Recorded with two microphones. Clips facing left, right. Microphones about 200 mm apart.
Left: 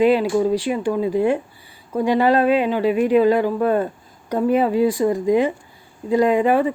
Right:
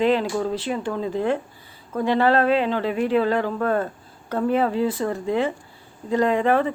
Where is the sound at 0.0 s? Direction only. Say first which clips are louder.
Left 5 dB; 10° left (ahead or behind).